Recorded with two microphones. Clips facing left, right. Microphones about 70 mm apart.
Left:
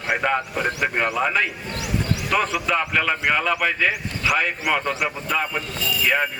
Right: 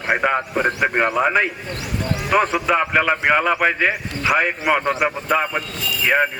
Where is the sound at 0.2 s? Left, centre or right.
Right.